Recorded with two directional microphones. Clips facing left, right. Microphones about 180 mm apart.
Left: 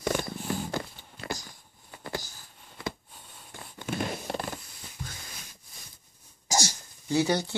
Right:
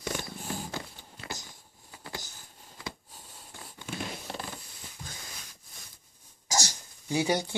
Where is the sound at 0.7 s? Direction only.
50° left (ahead or behind).